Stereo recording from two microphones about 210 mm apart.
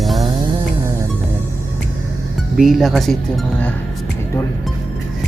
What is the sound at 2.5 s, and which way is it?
Speech, centre (ahead or behind).